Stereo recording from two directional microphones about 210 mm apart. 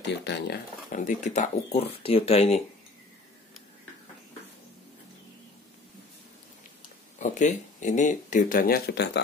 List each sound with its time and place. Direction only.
0.0 s speech: 55° left (ahead or behind)
0.9 s speech: 35° left (ahead or behind)
7.2 s speech: 35° left (ahead or behind); by 9.2 s 50° left (ahead or behind)